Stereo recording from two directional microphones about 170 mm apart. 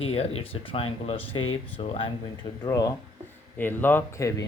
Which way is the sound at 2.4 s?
20° left (ahead or behind).